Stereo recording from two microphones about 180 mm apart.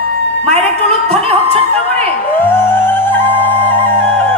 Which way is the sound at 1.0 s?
35° right (ahead or behind).